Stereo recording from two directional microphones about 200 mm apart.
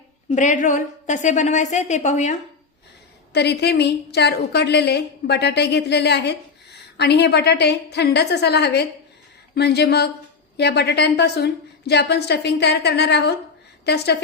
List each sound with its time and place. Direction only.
0.3 s a woman's voice: 40° left (ahead or behind)
3.3 s a woman's voice: 55° left (ahead or behind)